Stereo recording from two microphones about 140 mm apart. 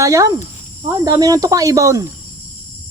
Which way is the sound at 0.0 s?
25° right (ahead or behind).